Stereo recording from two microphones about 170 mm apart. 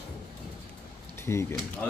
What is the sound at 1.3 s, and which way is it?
Speech, 15° left (ahead or behind).